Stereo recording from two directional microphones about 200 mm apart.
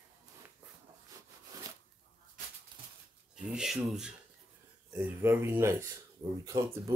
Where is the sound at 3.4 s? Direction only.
5° right (ahead or behind).